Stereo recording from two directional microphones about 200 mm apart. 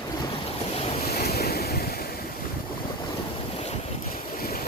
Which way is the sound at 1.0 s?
50° left (ahead or behind).